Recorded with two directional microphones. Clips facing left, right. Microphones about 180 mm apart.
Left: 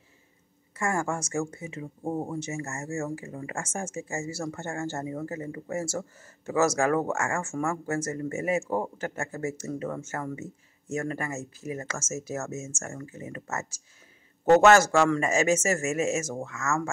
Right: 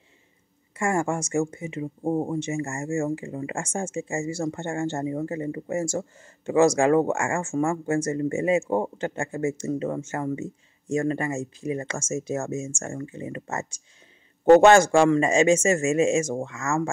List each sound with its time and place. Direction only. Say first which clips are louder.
0.9 s speech: right 6 dB; 25° right (ahead or behind)